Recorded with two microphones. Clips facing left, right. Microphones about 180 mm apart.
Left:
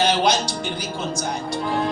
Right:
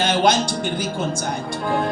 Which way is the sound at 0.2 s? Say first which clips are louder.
Right 3 dB; 50° right (ahead or behind).